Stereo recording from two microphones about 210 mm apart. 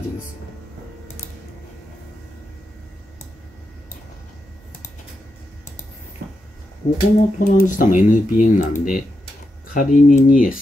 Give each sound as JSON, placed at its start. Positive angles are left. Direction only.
{"t": 6.8, "sound": "speech", "side_deg": 30}